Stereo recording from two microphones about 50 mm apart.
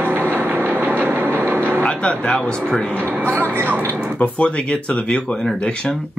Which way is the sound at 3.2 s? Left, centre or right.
Right.